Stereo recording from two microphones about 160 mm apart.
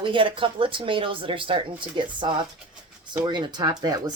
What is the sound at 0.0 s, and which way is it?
Speech, 30° right (ahead or behind).